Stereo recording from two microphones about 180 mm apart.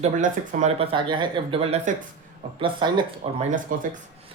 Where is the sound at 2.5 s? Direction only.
25° right (ahead or behind).